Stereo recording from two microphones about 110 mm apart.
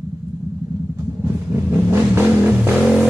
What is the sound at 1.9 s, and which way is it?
Vehicle, 20° right (ahead or behind).